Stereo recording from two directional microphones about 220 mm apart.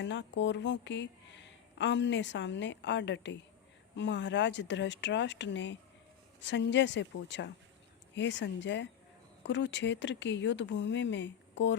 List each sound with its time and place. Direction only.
0.0 s speech: 55° left (ahead or behind)